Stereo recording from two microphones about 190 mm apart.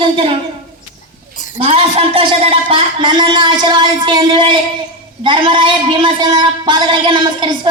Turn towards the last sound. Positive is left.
turn(degrees=-25)  # may be behind; listen again after turning